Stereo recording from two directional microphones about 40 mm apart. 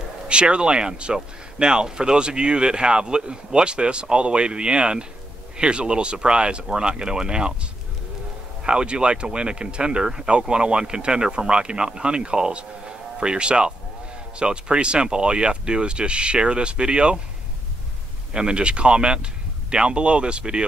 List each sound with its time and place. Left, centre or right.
0.3 s speech: right
8.6 s speech: right
18.3 s speech: right